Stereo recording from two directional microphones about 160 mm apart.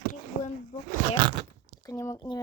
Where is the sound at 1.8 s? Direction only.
20° left (ahead or behind).